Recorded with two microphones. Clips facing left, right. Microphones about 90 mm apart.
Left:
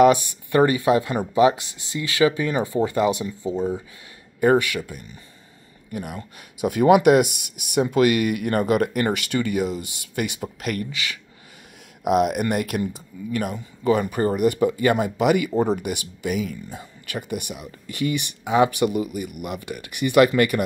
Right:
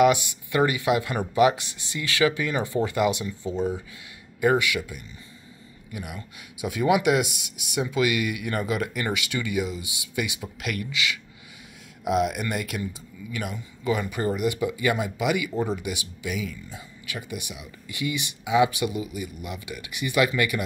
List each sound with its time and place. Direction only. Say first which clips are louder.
0.0 s speech: left 4 dB; 40° left (ahead or behind)
4.4 s speech: left 4 dB; 40° left (ahead or behind)
12.0 s speech: left 5 dB; 55° left (ahead or behind)